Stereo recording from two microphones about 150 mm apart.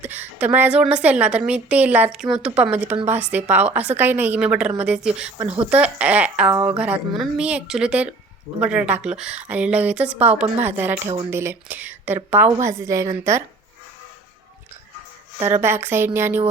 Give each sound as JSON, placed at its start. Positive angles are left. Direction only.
{"t": 0.0, "sound": "a woman's voice", "side_deg": -10}
{"t": 15.6, "sound": "a woman's voice", "side_deg": -15}